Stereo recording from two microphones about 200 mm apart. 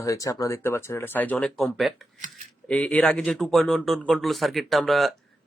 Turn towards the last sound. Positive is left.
turn(degrees=0)  # may be behind; listen again after turning